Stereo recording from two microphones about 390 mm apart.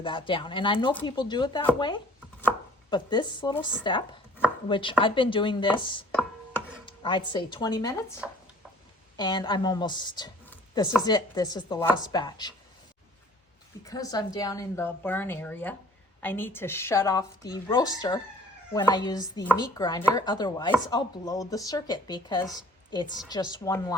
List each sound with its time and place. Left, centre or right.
0.0 s speech: centre
6.1 s chopping: centre
6.8 s a woman's voice: centre
13.8 s speech: centre